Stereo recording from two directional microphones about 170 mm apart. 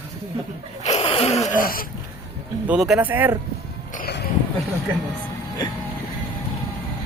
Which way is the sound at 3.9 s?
50° left (ahead or behind).